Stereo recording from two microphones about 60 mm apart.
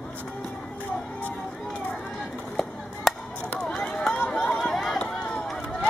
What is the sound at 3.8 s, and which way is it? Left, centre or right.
Run, centre.